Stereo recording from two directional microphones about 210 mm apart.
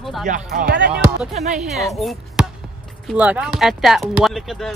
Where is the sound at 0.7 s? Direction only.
50° right (ahead or behind).